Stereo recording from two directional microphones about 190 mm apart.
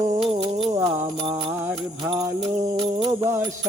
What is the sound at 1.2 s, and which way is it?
Music, 25° right (ahead or behind).